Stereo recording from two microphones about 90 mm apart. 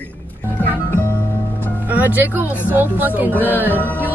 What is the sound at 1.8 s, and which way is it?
A woman's voice, 20° right (ahead or behind).